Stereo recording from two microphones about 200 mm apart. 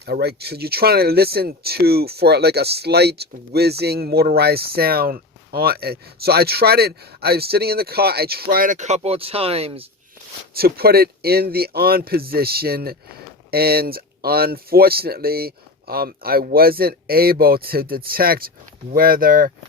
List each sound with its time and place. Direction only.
0.0 s speech: 55° right (ahead or behind); by 9.8 s 30° right (ahead or behind)
10.5 s speech: 50° right (ahead or behind)